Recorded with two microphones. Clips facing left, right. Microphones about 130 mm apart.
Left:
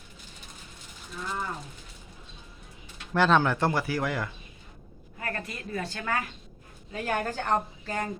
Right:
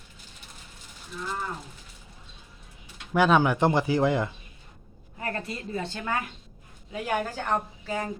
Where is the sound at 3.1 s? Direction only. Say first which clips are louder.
Right 2 dB; 10° right (ahead or behind).